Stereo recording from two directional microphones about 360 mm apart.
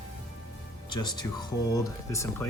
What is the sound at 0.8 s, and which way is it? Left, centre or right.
Speech, centre.